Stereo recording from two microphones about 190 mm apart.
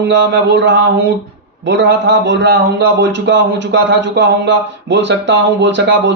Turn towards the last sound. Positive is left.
turn(degrees=-70)  # may be behind; listen again after turning